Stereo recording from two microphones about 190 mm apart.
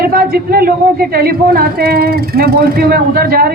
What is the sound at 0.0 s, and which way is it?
A man's voice, 55° right (ahead or behind).